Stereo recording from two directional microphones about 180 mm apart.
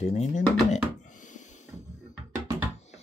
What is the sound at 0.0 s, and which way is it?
Speech, 40° left (ahead or behind).